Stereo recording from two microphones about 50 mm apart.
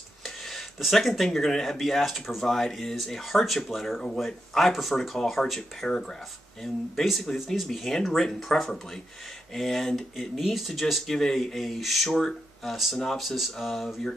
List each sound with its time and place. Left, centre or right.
0.2 s speech: centre